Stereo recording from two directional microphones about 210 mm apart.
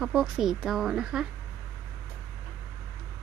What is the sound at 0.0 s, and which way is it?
Speech, 5° right (ahead or behind).